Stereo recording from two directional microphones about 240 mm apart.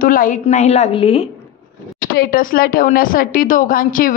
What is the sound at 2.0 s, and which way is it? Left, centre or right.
Speech, left.